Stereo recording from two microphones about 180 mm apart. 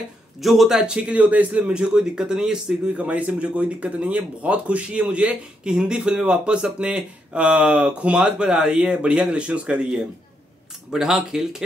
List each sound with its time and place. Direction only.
0.4 s speech: centre (ahead or behind)